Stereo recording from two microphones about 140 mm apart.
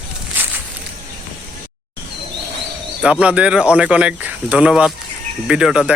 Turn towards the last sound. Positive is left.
turn(degrees=-5)  # may be behind; listen again after turning